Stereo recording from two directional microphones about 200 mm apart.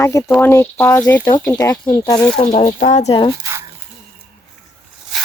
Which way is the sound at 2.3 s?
35° left (ahead or behind).